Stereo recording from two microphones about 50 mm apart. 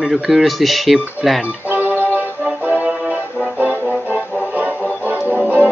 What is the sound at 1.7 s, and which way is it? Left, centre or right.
Music, right.